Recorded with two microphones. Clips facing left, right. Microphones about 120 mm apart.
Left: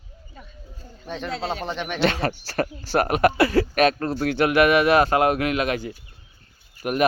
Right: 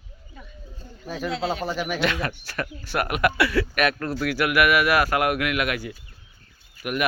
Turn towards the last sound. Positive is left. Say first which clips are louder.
# left 4 dB
turn(degrees=35)  # may be behind; listen again after turning